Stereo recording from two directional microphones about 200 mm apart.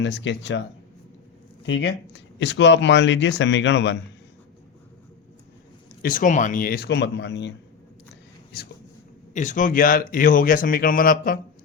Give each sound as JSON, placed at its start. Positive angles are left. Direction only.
{"t": 0.0, "sound": "speech", "side_deg": 65}
{"t": 1.6, "sound": "speech", "side_deg": 65}
{"t": 6.0, "sound": "speech", "side_deg": 45}
{"t": 9.3, "sound": "speech", "side_deg": 40}